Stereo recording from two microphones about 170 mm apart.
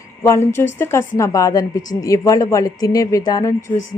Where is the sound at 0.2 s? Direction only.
15° left (ahead or behind).